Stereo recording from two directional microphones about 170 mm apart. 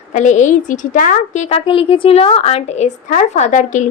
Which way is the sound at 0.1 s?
45° left (ahead or behind).